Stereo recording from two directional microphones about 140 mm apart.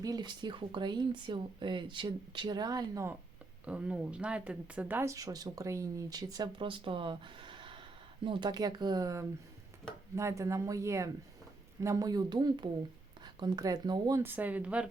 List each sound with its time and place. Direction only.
0.0 s speech: 30° right (ahead or behind)
3.7 s speech: 10° right (ahead or behind)
5.1 s speech: 25° right (ahead or behind)
14.2 s speech: 15° right (ahead or behind)